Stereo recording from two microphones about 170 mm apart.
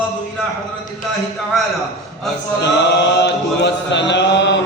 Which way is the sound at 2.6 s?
90° left.